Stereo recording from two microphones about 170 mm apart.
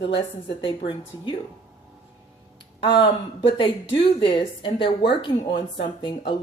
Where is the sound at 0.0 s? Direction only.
90° left.